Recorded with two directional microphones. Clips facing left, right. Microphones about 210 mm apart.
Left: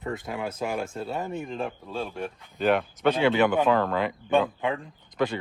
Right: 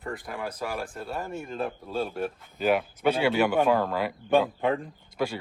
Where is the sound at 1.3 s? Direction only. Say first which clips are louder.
Left 1 dB; centre (ahead or behind).